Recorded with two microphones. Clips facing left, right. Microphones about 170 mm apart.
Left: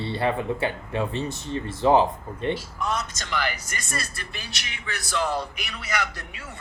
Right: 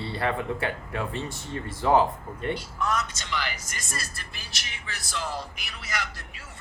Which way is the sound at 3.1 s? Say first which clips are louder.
Left 4 dB; 45° left (ahead or behind).